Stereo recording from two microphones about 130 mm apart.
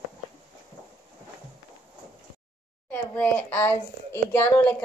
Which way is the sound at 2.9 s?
15° left (ahead or behind).